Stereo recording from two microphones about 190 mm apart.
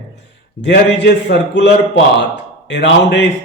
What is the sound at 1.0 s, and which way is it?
Speech, 65° left (ahead or behind).